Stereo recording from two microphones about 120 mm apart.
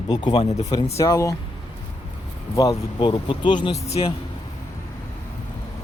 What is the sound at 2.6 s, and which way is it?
Speech, 30° left (ahead or behind).